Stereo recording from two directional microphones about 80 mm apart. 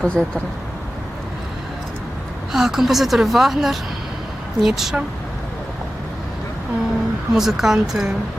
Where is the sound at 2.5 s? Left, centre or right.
Centre.